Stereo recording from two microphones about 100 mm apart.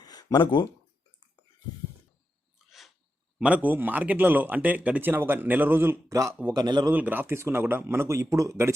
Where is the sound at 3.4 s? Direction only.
15° right (ahead or behind); by 6.3 s 30° right (ahead or behind).